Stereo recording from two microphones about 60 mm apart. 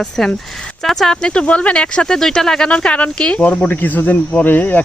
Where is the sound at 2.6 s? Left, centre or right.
Centre.